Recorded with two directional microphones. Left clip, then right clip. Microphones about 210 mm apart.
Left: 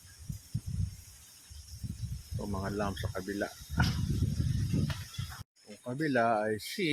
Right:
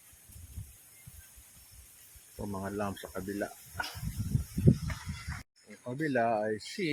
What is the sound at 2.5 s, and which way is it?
Speech, 5° left (ahead or behind).